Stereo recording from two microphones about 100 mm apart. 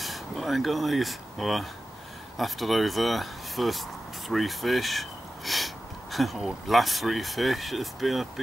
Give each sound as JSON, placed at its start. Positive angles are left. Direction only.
{"t": 0.0, "sound": "speech", "side_deg": 0}